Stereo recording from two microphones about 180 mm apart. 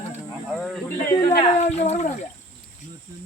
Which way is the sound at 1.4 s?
40° left (ahead or behind).